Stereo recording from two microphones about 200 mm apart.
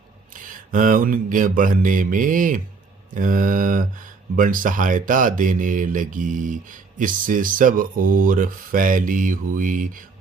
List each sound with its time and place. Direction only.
0.3 s speech: 40° right (ahead or behind)